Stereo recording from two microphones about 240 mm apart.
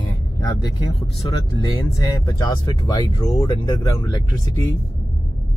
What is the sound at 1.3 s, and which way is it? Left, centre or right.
Speech, centre.